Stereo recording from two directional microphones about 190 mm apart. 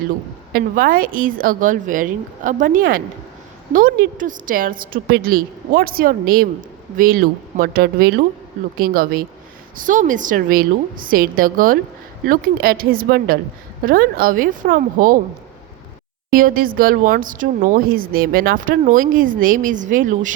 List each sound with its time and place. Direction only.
0.5 s a woman's voice: 50° right (ahead or behind)
16.3 s a woman's voice: 50° right (ahead or behind)